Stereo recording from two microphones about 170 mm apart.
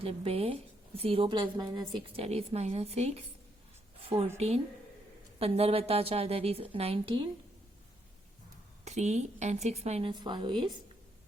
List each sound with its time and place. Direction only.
0.0 s speech: 35° right (ahead or behind)
4.4 s speech: 35° right (ahead or behind)
8.8 s speech: 40° right (ahead or behind)
10.1 s speech: 25° right (ahead or behind)